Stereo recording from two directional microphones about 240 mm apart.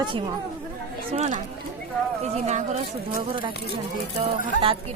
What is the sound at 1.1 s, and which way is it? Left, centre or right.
Speech, right.